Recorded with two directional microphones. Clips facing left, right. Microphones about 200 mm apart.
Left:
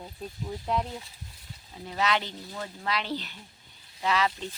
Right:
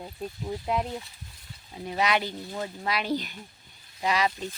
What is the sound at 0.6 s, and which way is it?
Speech, 10° right (ahead or behind).